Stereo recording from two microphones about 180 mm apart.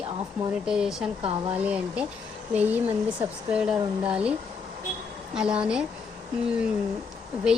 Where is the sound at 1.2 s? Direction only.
30° right (ahead or behind).